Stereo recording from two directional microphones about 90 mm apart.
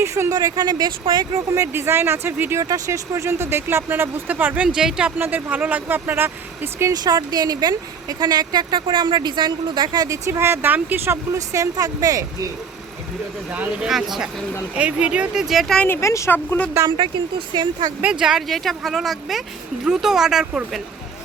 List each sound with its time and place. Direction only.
0.0 s speech: 30° right (ahead or behind)
2.6 s speech: 40° right (ahead or behind); by 5.1 s 10° right (ahead or behind)
5.1 s speech: 20° right (ahead or behind)
6.9 s a woman's voice: 50° right (ahead or behind)
10.1 s speech: 35° right (ahead or behind)
13.8 s speech: 5° right (ahead or behind)
16.0 s speech: 35° left (ahead or behind)
16.3 s speech: 20° left (ahead or behind)
17.0 s speech: 65° right (ahead or behind)
18.0 s speech: 10° right (ahead or behind)